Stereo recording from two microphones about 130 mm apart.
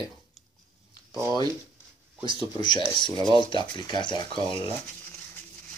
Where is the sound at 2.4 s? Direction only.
35° left (ahead or behind).